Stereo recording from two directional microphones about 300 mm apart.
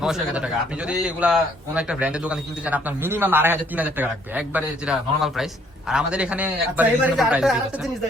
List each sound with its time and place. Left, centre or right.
0.0 s a man's voice: centre